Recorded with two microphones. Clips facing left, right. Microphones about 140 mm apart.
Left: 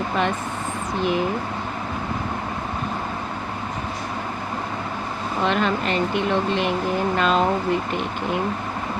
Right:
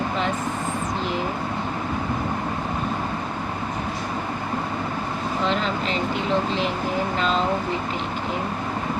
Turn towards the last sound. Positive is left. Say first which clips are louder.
# left 3 dB
turn(degrees=55)  # may be behind; listen again after turning